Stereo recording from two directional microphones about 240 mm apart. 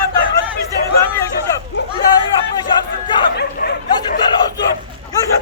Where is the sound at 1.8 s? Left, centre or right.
Left.